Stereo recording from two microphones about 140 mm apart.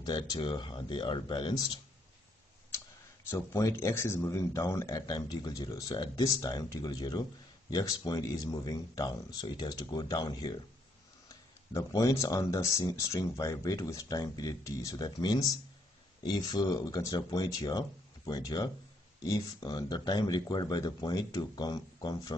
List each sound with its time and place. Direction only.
0.0 s speech: 30° left (ahead or behind)
3.3 s speech: 20° left (ahead or behind)